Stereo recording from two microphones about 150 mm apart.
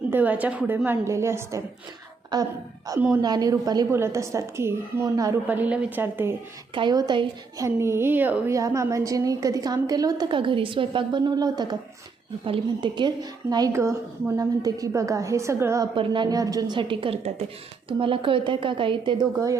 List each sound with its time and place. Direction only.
0.1 s a woman's voice: 10° right (ahead or behind)
5.5 s a woman's voice: 10° right (ahead or behind)
6.7 s a woman's voice: 30° right (ahead or behind)
7.8 s a woman's voice: 15° right (ahead or behind)
16.0 s a woman's voice: 30° right (ahead or behind)